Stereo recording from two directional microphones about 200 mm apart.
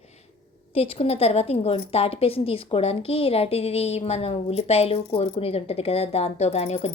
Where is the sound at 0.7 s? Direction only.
30° left (ahead or behind).